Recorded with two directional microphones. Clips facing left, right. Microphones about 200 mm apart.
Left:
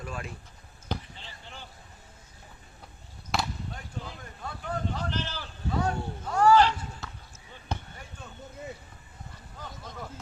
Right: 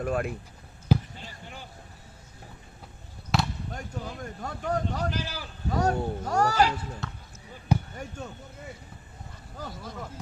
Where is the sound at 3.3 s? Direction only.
Centre (ahead or behind).